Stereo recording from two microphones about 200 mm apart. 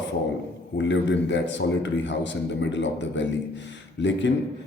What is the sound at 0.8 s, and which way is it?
A man's voice, 65° left (ahead or behind).